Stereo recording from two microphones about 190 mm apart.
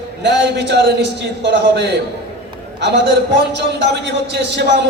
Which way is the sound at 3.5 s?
65° right (ahead or behind).